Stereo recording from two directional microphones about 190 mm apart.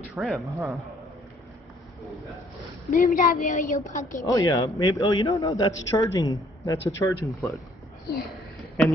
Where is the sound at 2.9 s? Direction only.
45° left (ahead or behind).